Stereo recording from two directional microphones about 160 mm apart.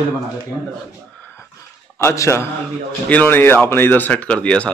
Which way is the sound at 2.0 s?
15° left (ahead or behind).